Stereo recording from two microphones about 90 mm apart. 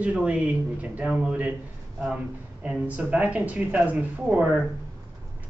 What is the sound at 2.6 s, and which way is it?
Speech, 15° right (ahead or behind).